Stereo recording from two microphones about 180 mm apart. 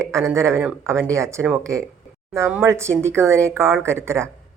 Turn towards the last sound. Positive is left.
turn(degrees=-15)  # may be behind; listen again after turning